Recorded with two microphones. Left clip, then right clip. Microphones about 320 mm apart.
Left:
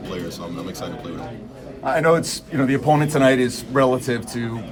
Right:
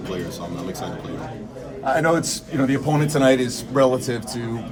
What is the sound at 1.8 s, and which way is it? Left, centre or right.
A man's voice, centre.